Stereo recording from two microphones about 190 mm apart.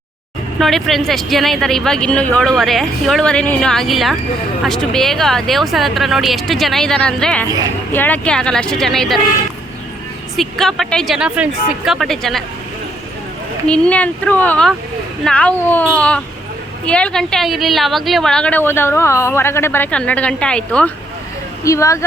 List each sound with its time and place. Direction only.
0.6 s a woman's voice: centre (ahead or behind)
7.4 s a woman's voice: 20° right (ahead or behind)
7.9 s a woman's voice: 10° left (ahead or behind)
10.3 s a woman's voice: centre (ahead or behind)
13.7 s a woman's voice: 5° left (ahead or behind)
21.6 s speech: 15° left (ahead or behind)